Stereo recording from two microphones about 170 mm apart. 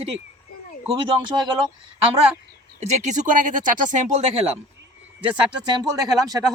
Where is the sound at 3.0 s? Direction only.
50° right (ahead or behind).